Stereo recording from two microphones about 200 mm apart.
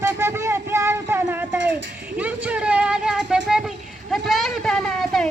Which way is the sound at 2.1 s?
10° right (ahead or behind).